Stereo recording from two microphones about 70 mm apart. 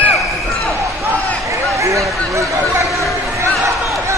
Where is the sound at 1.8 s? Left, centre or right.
Right.